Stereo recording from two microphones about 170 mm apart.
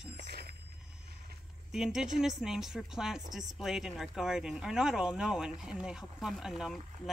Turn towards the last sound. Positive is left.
turn(degrees=0)  # may be behind; listen again after turning